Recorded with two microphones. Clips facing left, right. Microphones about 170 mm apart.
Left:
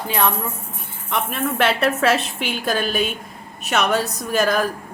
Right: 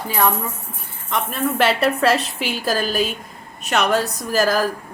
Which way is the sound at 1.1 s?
Centre (ahead or behind).